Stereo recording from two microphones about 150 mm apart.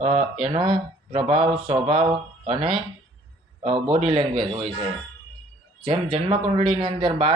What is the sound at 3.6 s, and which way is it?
Speech, 35° right (ahead or behind).